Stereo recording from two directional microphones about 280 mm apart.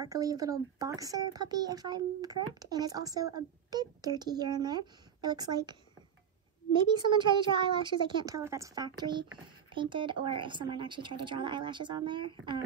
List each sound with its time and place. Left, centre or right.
0.0 s speech: centre